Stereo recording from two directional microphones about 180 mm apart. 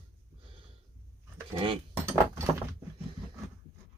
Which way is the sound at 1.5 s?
30° right (ahead or behind).